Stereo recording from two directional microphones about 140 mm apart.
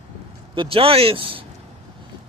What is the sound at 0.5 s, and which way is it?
Speech, 40° right (ahead or behind).